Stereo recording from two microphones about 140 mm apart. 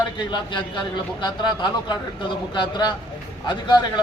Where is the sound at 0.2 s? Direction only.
35° left (ahead or behind).